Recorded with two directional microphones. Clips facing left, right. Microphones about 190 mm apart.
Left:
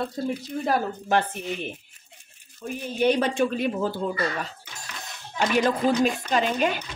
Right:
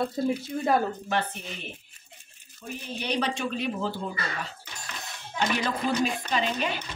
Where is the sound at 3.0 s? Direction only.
50° left (ahead or behind).